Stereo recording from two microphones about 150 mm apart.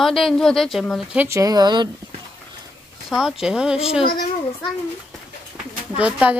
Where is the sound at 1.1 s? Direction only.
15° right (ahead or behind).